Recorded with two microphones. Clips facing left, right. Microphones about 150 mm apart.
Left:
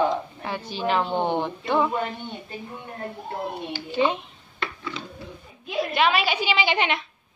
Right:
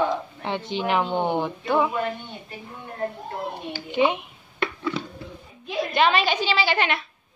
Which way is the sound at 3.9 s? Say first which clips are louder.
Right 2 dB; 15° right (ahead or behind).